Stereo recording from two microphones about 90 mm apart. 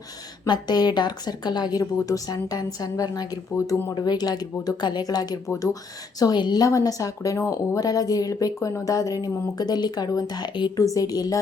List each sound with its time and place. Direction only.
0.4 s speech: 50° left (ahead or behind)
5.5 s speech: 30° left (ahead or behind)
6.1 s speech: 50° left (ahead or behind)
6.7 s speech: 40° left (ahead or behind); by 10.7 s 55° left (ahead or behind)
10.9 s speech: 45° left (ahead or behind)